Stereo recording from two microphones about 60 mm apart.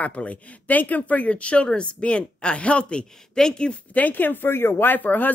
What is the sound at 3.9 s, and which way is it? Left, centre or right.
Speech, left.